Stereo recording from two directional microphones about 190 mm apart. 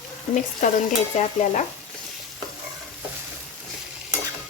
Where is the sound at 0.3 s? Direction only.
40° left (ahead or behind).